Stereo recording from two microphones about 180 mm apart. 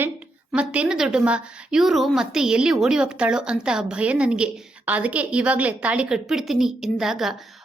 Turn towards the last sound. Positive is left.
turn(degrees=0)  # may be behind; listen again after turning